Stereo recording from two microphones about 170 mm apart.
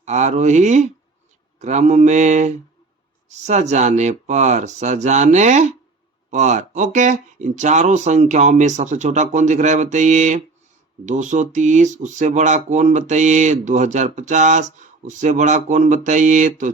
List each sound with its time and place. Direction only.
0.0 s speech: 45° right (ahead or behind)